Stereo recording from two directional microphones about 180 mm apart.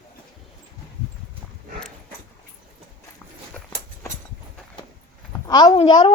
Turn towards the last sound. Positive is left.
turn(degrees=30)  # may be behind; listen again after turning